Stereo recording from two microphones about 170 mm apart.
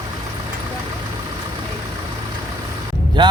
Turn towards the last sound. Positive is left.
turn(degrees=-25)  # may be behind; listen again after turning